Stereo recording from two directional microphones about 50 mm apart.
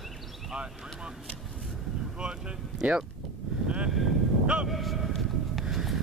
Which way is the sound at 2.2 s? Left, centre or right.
Right.